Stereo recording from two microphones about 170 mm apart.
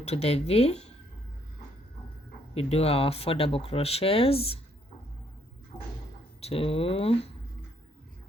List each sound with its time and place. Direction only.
0.0 s speech: 40° left (ahead or behind)
2.6 s speech: 35° left (ahead or behind)
6.4 s speech: 35° left (ahead or behind)